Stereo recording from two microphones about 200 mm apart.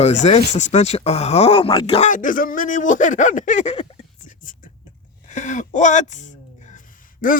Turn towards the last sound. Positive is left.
turn(degrees=40)  # may be behind; listen again after turning